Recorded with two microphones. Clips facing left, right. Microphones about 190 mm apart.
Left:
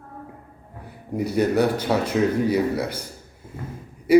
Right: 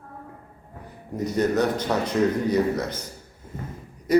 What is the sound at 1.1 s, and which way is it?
A man's voice, 10° left (ahead or behind).